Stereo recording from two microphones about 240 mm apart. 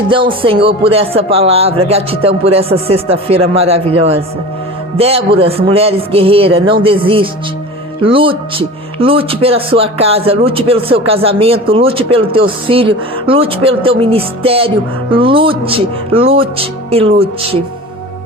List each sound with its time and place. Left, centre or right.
0.4 s speech: right